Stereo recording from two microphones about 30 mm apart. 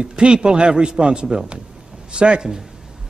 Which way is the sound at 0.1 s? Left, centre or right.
Right.